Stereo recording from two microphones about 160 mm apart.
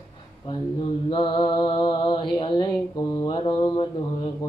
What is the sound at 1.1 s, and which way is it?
Mantra, 30° left (ahead or behind).